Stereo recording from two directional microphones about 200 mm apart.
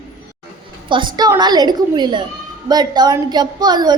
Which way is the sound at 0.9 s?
25° right (ahead or behind).